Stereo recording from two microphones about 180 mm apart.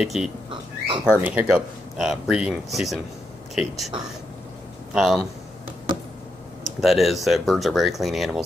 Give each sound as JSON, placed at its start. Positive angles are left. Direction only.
{"t": 0.0, "sound": "speech", "side_deg": -5}
{"t": 0.5, "sound": "bird", "side_deg": -25}
{"t": 1.2, "sound": "speech", "side_deg": -10}
{"t": 4.9, "sound": "speech", "side_deg": 0}
{"t": 6.6, "sound": "speech", "side_deg": 0}